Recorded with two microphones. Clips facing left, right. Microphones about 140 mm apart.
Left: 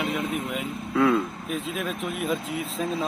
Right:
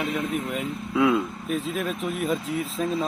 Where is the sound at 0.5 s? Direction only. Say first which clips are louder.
Even; 5° right (ahead or behind).